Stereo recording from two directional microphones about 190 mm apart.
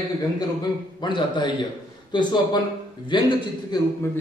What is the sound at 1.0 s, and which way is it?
A man's voice, 25° left (ahead or behind).